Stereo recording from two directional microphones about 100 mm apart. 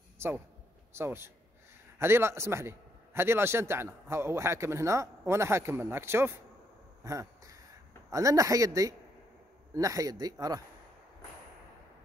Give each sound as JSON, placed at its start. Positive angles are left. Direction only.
{"t": 0.9, "sound": "a man's voice", "side_deg": -25}
{"t": 7.0, "sound": "a sound", "side_deg": -30}
{"t": 8.1, "sound": "speech", "side_deg": -35}